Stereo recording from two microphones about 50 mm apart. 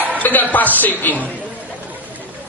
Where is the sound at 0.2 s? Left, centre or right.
Left.